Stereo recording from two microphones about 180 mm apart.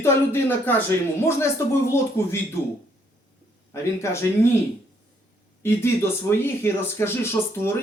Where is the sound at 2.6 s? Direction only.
15° left (ahead or behind).